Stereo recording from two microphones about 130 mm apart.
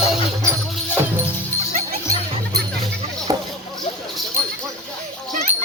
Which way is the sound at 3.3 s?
25° right (ahead or behind).